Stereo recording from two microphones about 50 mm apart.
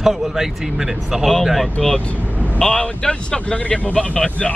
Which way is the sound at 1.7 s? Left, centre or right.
Centre.